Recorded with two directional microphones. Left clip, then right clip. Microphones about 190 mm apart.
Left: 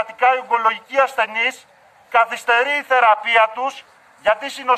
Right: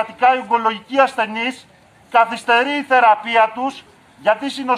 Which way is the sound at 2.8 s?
10° left (ahead or behind).